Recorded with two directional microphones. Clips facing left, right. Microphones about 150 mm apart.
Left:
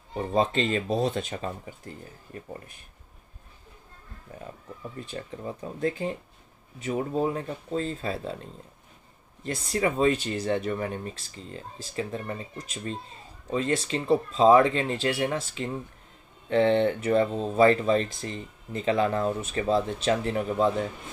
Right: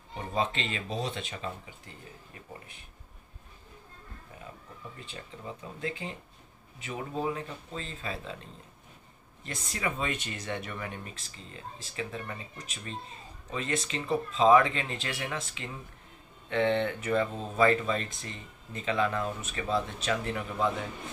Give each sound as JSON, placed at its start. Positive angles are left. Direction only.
{"t": 0.2, "sound": "speech", "side_deg": 40}
{"t": 5.6, "sound": "speech", "side_deg": 40}
{"t": 9.4, "sound": "speech", "side_deg": 35}
{"t": 13.5, "sound": "speech", "side_deg": 35}